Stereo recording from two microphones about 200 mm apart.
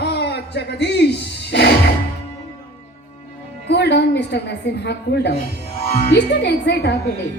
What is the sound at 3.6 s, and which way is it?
A woman's voice, 60° left (ahead or behind).